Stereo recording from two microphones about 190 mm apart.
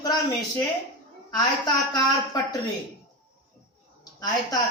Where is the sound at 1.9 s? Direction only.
20° left (ahead or behind).